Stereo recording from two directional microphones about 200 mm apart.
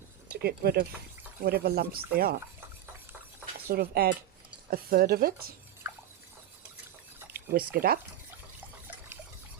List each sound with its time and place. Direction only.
0.3 s speech: 50° right (ahead or behind)
3.7 s speech: 50° right (ahead or behind)
7.5 s speech: 50° right (ahead or behind)